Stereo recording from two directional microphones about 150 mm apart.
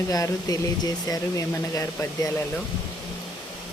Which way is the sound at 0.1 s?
25° left (ahead or behind).